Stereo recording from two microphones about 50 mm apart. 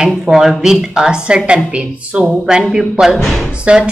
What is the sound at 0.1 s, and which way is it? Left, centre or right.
A woman's voice, centre.